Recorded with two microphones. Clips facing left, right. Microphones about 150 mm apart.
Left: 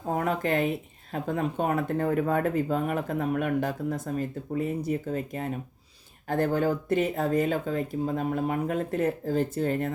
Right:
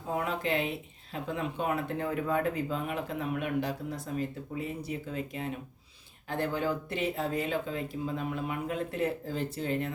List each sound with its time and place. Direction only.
0.1 s speech: 45° left (ahead or behind)